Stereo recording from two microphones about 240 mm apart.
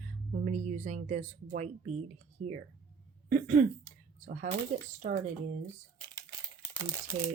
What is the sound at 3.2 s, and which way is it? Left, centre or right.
Throat clearing, right.